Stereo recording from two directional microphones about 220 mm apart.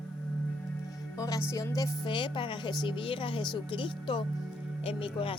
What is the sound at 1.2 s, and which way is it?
Music, 15° left (ahead or behind).